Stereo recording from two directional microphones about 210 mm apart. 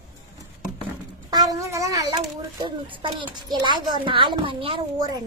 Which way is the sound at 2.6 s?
25° right (ahead or behind).